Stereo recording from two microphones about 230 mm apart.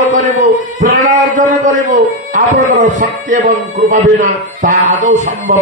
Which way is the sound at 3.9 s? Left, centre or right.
Right.